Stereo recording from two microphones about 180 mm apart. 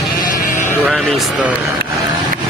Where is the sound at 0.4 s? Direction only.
45° left (ahead or behind).